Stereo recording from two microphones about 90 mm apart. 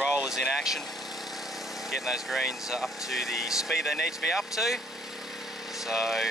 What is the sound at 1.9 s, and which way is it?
Speech, 5° right (ahead or behind).